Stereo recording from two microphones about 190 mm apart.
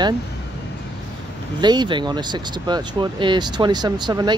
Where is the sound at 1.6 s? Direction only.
25° right (ahead or behind).